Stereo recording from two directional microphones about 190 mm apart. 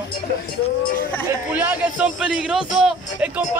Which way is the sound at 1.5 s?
10° right (ahead or behind).